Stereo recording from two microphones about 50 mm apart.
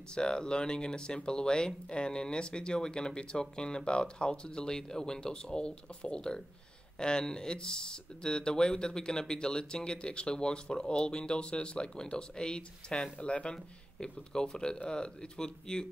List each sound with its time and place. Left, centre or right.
0.1 s speech: centre